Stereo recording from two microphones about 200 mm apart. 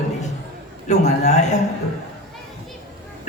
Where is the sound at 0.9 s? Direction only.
35° left (ahead or behind).